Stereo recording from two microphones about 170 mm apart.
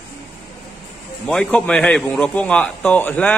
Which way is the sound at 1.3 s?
5° left (ahead or behind).